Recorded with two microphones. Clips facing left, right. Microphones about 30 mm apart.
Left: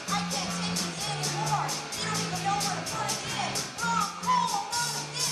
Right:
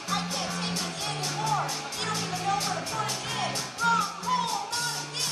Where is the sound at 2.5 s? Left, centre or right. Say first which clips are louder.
Right 3 dB; centre.